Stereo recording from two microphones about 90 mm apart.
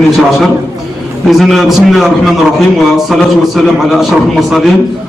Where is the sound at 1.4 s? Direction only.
Centre (ahead or behind).